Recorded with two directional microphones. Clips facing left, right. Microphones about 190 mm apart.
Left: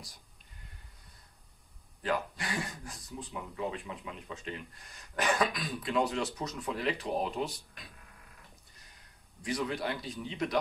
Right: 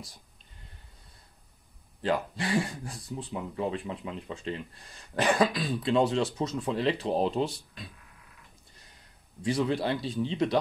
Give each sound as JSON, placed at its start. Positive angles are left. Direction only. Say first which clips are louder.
{"t": 2.0, "sound": "speech", "louder": "right 4 dB", "side_deg": -30}
{"t": 9.4, "sound": "speech", "louder": "right 6 dB", "side_deg": -30}